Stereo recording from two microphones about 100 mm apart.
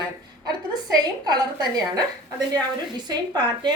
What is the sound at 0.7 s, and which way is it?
Speech, 40° right (ahead or behind).